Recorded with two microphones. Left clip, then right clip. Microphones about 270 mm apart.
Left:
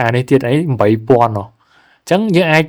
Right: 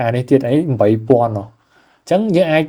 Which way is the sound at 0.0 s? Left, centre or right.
Left.